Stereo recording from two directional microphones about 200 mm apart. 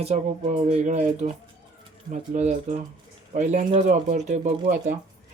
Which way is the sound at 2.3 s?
40° right (ahead or behind).